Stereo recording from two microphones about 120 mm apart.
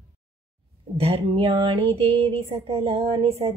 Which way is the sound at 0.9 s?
55° right (ahead or behind).